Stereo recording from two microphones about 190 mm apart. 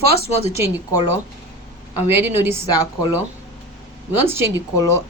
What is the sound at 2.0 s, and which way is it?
Speech, 10° right (ahead or behind).